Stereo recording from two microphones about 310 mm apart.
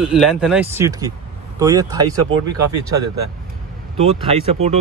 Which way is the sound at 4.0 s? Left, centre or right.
Centre.